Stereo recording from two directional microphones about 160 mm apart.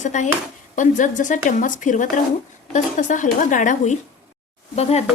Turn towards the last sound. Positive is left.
turn(degrees=40)  # may be behind; listen again after turning